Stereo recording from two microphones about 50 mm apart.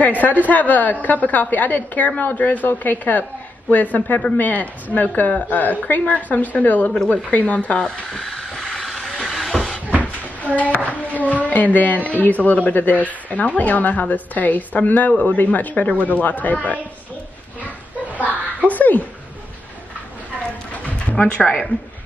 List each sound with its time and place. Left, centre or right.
0.2 s a woman's voice: left
7.8 s train: centre
10.4 s a woman's voice: left
17.6 s children playing: left
18.7 s speech: left
21.2 s speech: centre